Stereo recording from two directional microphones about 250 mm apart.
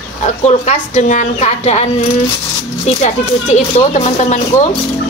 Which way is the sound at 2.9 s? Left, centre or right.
Left.